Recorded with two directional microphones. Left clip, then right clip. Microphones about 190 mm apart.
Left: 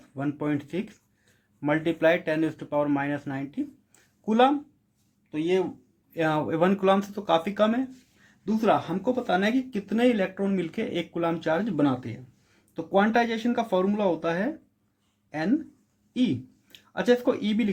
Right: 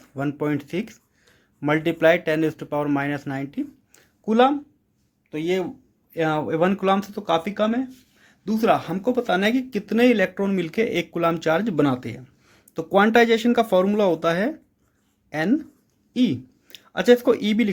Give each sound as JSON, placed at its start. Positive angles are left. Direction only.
{"t": 0.1, "sound": "speech", "side_deg": -35}
{"t": 6.1, "sound": "speech", "side_deg": -25}
{"t": 8.4, "sound": "speech", "side_deg": -35}